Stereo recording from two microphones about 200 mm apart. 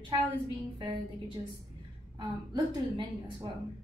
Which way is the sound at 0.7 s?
25° right (ahead or behind).